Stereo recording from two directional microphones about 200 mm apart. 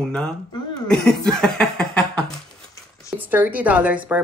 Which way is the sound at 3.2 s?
10° right (ahead or behind).